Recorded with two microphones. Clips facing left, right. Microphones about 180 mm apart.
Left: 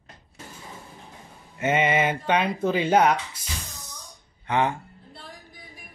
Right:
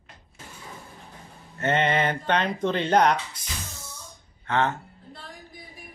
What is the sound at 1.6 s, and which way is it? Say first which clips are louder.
Speech: left 1 dB; 10° left (ahead or behind).